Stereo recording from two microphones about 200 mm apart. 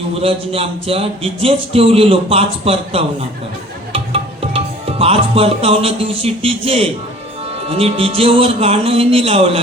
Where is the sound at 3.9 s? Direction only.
30° right (ahead or behind).